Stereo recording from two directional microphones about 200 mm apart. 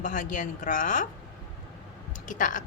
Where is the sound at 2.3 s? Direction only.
40° left (ahead or behind).